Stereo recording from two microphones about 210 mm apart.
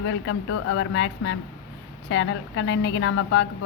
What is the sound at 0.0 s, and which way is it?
A woman's voice, 65° left (ahead or behind).